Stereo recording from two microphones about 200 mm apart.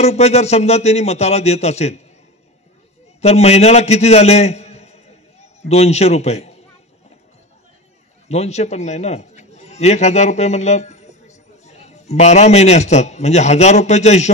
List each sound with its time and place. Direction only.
0.0 s speech: 30° left (ahead or behind)
3.2 s a man's voice: 30° left (ahead or behind)
8.3 s a man's voice: 35° left (ahead or behind)